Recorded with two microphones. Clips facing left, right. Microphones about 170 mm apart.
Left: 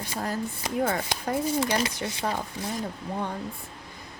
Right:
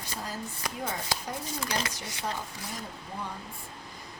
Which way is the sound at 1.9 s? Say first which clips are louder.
Left 6 dB; 60° left (ahead or behind).